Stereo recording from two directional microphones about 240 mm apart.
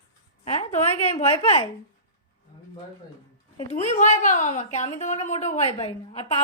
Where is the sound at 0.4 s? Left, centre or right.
Left.